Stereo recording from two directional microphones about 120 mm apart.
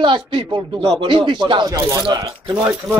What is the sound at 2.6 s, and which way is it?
Speech, 15° right (ahead or behind).